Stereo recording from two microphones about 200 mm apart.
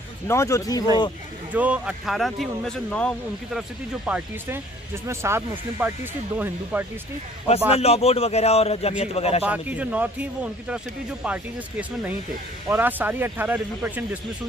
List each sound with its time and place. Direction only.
0.3 s speech: 15° left (ahead or behind)
1.5 s speech: 5° right (ahead or behind)
4.0 s speech: 10° right (ahead or behind)
7.7 s a man's voice: 30° left (ahead or behind)
9.4 s speech: 5° right (ahead or behind)
12.6 s speech: 10° right (ahead or behind)